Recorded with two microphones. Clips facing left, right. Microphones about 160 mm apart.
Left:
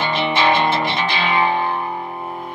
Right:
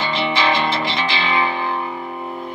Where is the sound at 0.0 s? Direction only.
55° left (ahead or behind).